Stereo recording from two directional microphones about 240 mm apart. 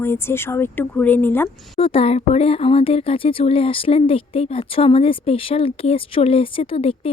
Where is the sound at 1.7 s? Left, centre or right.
Left.